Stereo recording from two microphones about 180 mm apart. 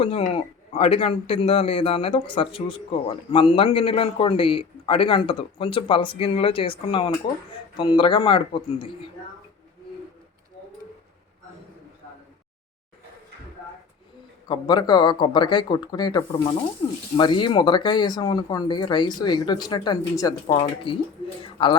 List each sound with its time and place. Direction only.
0.0 s a man's voice: 30° left (ahead or behind)
14.4 s speech: 25° left (ahead or behind)